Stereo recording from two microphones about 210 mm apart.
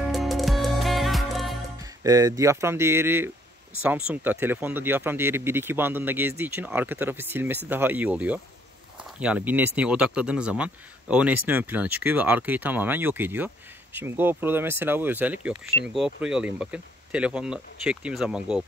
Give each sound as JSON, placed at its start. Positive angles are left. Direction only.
{"t": 0.0, "sound": "music", "side_deg": 0}
{"t": 1.8, "sound": "speech", "side_deg": -15}